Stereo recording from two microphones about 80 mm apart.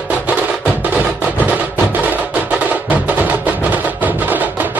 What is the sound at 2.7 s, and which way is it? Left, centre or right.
Music, centre.